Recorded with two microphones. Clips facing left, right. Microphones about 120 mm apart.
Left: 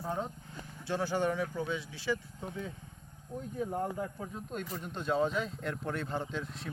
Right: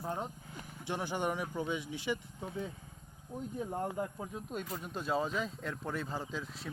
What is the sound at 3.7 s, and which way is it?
Speech, 10° right (ahead or behind).